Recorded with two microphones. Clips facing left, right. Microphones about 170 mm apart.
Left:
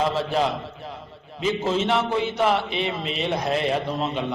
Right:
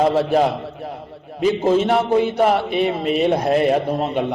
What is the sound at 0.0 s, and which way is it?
A man's voice, 45° right (ahead or behind).